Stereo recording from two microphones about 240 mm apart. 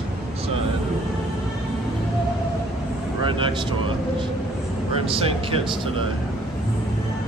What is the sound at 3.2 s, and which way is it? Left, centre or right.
Speech, right.